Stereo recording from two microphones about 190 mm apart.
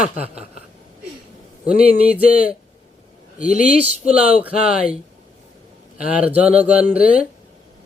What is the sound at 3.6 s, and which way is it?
Speech, 5° right (ahead or behind).